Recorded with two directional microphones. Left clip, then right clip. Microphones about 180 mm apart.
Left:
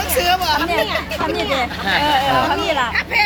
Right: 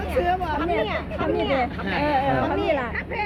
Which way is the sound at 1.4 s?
15° left (ahead or behind).